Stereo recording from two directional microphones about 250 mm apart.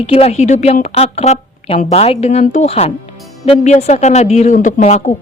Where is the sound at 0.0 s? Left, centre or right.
Left.